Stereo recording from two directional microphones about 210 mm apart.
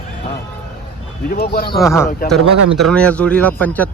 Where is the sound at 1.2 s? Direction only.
45° left (ahead or behind).